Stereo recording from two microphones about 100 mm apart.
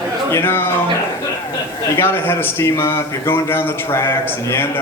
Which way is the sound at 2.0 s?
20° left (ahead or behind).